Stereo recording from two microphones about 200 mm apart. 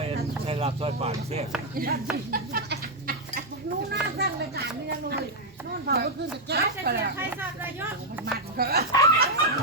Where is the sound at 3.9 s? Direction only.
50° right (ahead or behind).